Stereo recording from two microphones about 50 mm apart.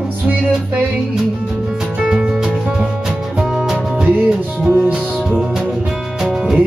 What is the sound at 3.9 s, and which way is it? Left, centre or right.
Music, right.